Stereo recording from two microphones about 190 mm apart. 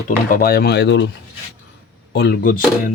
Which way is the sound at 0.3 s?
50° left (ahead or behind).